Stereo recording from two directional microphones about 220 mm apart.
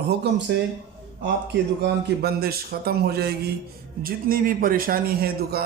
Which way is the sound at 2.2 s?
45° right (ahead or behind).